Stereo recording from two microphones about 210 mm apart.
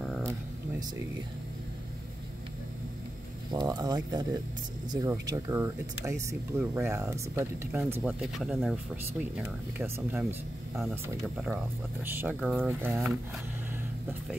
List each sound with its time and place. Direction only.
0.0 s a sound: 10° right (ahead or behind)
3.5 s speech: 20° right (ahead or behind)
12.0 s speech: 10° right (ahead or behind)